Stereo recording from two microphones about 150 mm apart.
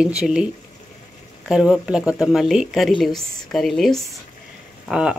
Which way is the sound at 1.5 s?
5° right (ahead or behind).